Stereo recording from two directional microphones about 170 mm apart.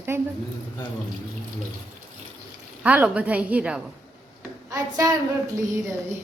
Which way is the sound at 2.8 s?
10° right (ahead or behind).